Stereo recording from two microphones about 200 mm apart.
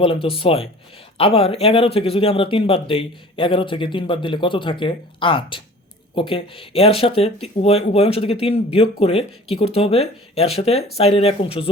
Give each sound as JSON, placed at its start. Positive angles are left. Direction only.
{"t": 0.0, "sound": "speech", "side_deg": 30}